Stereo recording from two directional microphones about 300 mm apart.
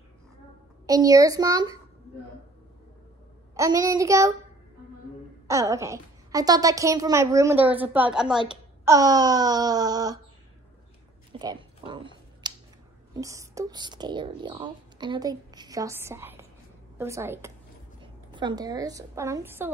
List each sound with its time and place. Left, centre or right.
0.8 s a woman's voice: centre
3.5 s a woman's voice: centre
5.5 s a woman's voice: centre
11.3 s a sound: centre
13.1 s a woman's voice: centre